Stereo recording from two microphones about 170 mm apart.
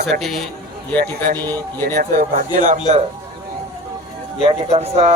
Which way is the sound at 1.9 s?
55° right (ahead or behind).